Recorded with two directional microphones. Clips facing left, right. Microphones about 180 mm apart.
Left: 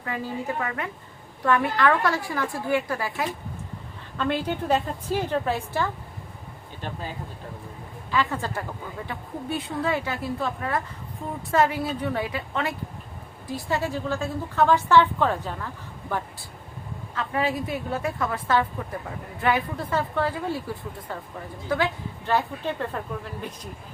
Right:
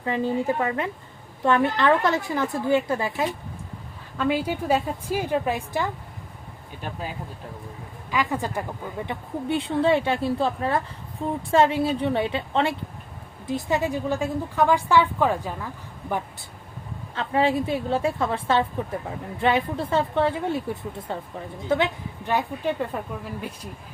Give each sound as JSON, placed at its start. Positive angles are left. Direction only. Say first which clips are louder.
{"t": 0.0, "sound": "a woman's voice", "louder": "right 6 dB", "side_deg": -25}
{"t": 4.2, "sound": "a woman's voice", "louder": "right 2 dB", "side_deg": -10}
{"t": 8.1, "sound": "a woman's voice", "louder": "right 1 dB", "side_deg": -15}
{"t": 9.0, "sound": "a woman's voice", "louder": "right 5 dB", "side_deg": -25}
{"t": 17.2, "sound": "a woman's voice", "louder": "right 4 dB", "side_deg": -30}
{"t": 22.3, "sound": "a woman's voice", "louder": "right 1 dB", "side_deg": -10}